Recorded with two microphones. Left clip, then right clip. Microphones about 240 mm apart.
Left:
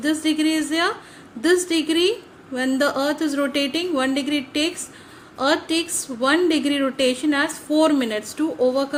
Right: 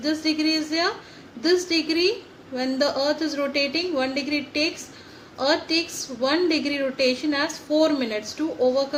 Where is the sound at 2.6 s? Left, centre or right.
Left.